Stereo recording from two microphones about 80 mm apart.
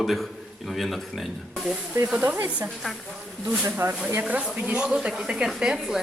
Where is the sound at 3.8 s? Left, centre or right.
Right.